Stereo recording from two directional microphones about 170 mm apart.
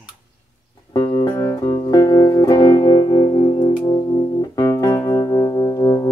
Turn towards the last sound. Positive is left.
turn(degrees=20)  # may be behind; listen again after turning